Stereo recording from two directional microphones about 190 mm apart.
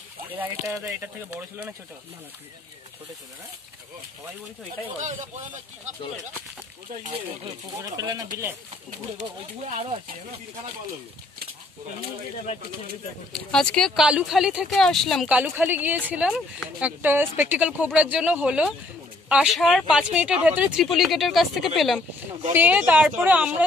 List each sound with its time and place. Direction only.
0.4 s speech: 10° right (ahead or behind)
7.1 s speech: 20° right (ahead or behind)
9.7 s speech: 35° right (ahead or behind)
13.3 s speech: 5° left (ahead or behind)